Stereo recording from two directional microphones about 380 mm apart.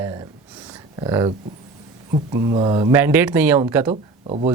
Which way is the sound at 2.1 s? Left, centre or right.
Centre.